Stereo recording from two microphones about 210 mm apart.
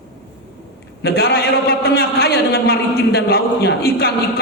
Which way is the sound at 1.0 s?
45° left (ahead or behind).